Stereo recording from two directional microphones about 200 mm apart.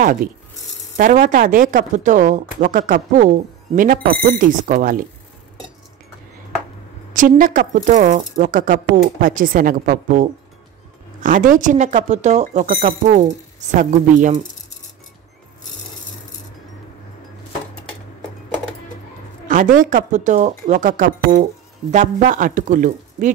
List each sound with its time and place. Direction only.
0.0 s a woman's voice: 40° right (ahead or behind)
7.2 s a woman's voice: 40° right (ahead or behind)
11.2 s a woman's voice: 40° right (ahead or behind)
19.5 s a woman's voice: 40° right (ahead or behind)